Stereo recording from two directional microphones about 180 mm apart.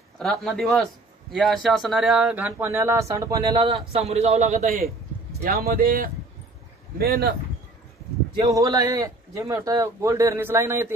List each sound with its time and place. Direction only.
0.2 s speech: centre (ahead or behind); by 3.6 s 15° right (ahead or behind)
3.6 s speech: 35° right (ahead or behind)
4.6 s speech: 55° right (ahead or behind)
8.4 s speech: 20° right (ahead or behind)